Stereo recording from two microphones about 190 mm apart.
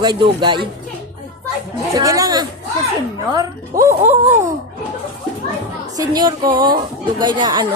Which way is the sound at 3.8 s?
15° right (ahead or behind).